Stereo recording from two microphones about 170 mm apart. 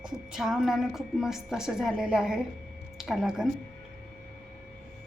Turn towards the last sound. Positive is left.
turn(degrees=0)  # may be behind; listen again after turning